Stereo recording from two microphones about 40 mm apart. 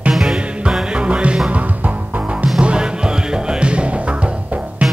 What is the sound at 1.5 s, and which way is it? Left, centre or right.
Music, right.